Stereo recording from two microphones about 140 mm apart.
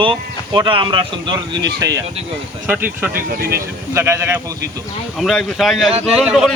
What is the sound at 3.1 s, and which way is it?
Speech, 90° right.